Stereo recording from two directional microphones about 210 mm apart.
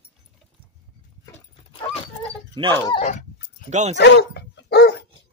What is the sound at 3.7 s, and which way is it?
Speech, 35° right (ahead or behind).